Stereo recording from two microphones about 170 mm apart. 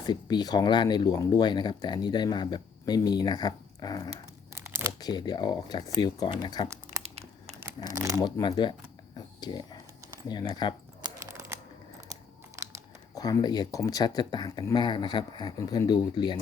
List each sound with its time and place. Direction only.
0.0 s speech: 25° left (ahead or behind)
7.0 s crumpling: 40° right (ahead or behind)
7.9 s speech: 20° right (ahead or behind)
8.2 s speech: 25° left (ahead or behind)
9.1 s a sound: 25° left (ahead or behind)
10.5 s speech: 25° left (ahead or behind)
11.0 s computer keyboard: 15° right (ahead or behind)
13.1 s speech: 20° left (ahead or behind)